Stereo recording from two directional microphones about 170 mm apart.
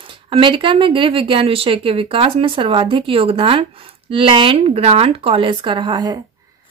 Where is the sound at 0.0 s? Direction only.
30° right (ahead or behind).